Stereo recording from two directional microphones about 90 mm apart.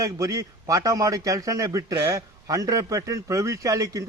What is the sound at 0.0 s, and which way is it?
A man's voice, 35° right (ahead or behind).